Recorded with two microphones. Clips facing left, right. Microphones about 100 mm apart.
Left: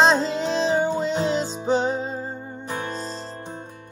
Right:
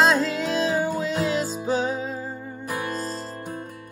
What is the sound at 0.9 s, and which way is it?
Music, 5° right (ahead or behind).